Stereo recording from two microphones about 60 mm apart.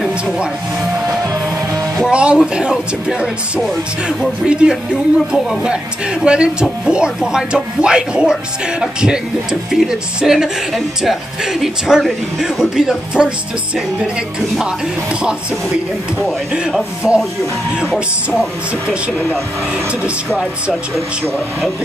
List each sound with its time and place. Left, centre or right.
2.0 s speech: centre
17.0 s speech: centre
19.1 s speech: centre